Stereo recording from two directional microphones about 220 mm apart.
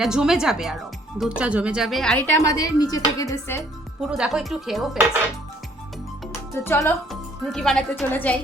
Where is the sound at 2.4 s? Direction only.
15° left (ahead or behind).